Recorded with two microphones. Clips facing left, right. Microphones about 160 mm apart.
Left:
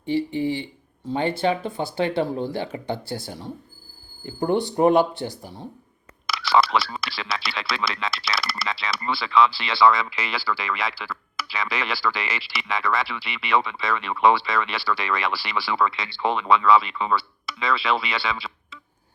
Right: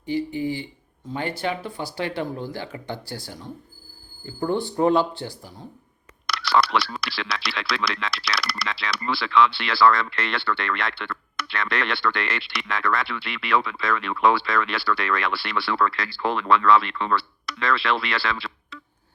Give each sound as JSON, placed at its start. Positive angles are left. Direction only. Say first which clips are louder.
{"t": 0.0, "sound": "speech", "louder": "left 2 dB", "side_deg": 25}
{"t": 6.2, "sound": "speech", "louder": "left 1 dB", "side_deg": 0}